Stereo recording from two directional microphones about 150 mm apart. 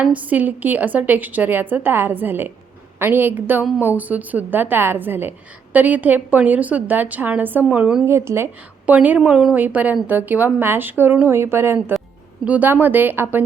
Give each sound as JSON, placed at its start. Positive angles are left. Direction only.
{"t": 0.0, "sound": "a woman's voice", "side_deg": -10}